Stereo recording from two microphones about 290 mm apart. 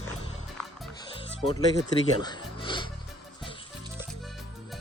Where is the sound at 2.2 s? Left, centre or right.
Centre.